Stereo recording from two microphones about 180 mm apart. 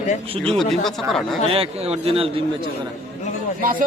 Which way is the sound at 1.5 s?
30° right (ahead or behind).